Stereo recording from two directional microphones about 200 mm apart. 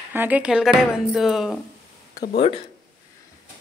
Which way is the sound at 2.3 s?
25° left (ahead or behind).